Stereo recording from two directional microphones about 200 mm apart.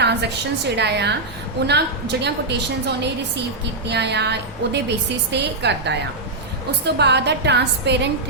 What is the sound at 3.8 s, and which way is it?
A woman's voice, 55° right (ahead or behind).